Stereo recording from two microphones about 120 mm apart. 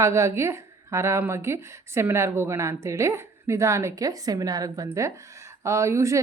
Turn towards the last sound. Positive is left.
turn(degrees=-25)  # may be behind; listen again after turning